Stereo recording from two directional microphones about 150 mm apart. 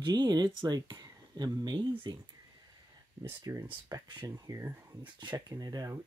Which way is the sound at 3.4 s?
20° right (ahead or behind).